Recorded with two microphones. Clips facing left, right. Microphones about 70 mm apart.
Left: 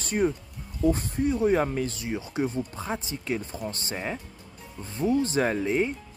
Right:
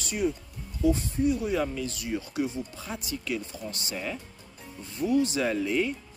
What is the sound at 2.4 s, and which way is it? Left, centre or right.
Speech, left.